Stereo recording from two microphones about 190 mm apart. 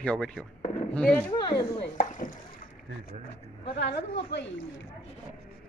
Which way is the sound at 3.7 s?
65° left (ahead or behind).